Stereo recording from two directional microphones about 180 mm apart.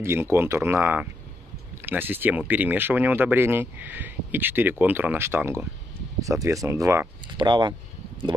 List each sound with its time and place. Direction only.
0.0 s speech: 15° right (ahead or behind)